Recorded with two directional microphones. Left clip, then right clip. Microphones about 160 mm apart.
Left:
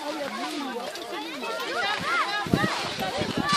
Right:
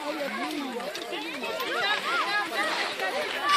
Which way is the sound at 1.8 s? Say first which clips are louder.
Left 1 dB; 65° left (ahead or behind).